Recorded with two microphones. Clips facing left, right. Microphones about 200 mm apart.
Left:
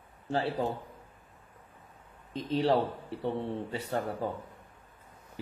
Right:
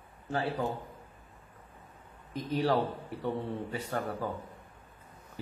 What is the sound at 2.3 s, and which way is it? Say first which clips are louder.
A man's voice: left 2 dB; 25° left (ahead or behind).